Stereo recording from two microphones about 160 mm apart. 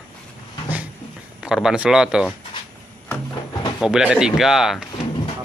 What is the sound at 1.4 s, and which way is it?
Speech, 5° right (ahead or behind).